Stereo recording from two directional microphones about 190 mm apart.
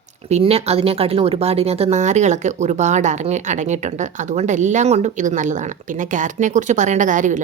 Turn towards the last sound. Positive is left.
turn(degrees=-40)  # may be behind; listen again after turning